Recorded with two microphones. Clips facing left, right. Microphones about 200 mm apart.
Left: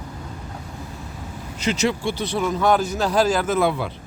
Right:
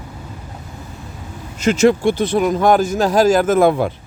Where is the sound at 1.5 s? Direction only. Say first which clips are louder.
Right 9 dB; 50° right (ahead or behind).